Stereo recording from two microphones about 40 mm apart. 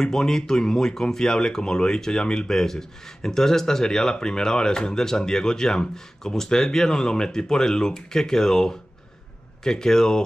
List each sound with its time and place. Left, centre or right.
0.0 s speech: centre